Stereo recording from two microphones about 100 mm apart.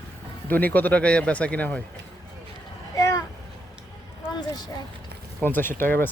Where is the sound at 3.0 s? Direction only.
35° left (ahead or behind).